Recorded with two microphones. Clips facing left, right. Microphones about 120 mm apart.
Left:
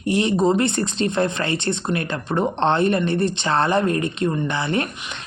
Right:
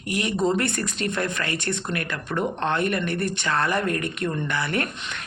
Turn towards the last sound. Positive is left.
turn(degrees=20)  # may be behind; listen again after turning